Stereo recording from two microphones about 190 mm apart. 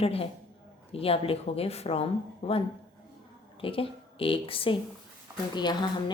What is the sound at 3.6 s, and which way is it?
A woman's voice, 30° left (ahead or behind).